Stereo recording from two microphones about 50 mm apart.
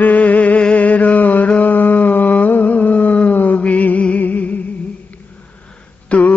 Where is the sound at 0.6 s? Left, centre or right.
Left.